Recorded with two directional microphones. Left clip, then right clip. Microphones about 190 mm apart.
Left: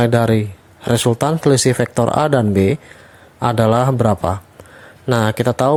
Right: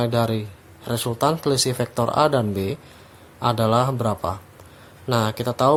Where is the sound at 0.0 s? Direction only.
35° left (ahead or behind).